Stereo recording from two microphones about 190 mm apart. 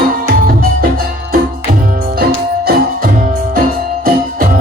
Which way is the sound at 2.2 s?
55° right (ahead or behind).